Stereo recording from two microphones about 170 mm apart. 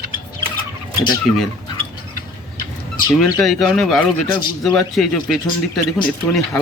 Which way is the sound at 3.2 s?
Centre (ahead or behind).